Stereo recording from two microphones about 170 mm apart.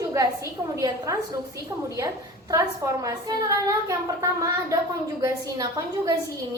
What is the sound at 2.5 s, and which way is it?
A woman's voice, 20° right (ahead or behind).